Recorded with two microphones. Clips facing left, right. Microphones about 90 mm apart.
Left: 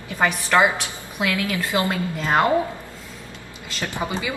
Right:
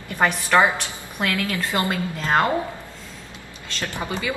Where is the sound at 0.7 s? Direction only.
10° left (ahead or behind).